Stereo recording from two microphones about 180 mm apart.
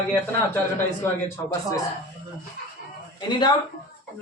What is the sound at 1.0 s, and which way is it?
Speech, 15° left (ahead or behind).